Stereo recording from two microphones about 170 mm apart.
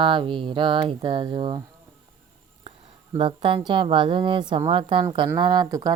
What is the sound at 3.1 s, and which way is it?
A woman's voice, 30° right (ahead or behind).